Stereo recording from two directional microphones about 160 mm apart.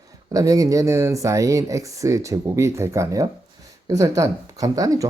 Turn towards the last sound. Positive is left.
turn(degrees=-20)  # may be behind; listen again after turning